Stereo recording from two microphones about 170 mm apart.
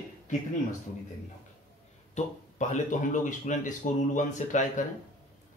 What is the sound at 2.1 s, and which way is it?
Speech, 45° left (ahead or behind).